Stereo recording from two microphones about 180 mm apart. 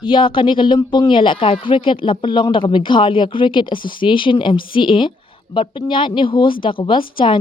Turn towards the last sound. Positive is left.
turn(degrees=25)  # may be behind; listen again after turning